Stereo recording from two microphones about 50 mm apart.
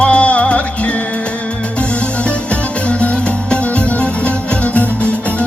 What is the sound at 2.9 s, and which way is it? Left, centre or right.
Music, left.